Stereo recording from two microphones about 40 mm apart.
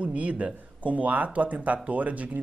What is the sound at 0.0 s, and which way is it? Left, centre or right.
Speech, right.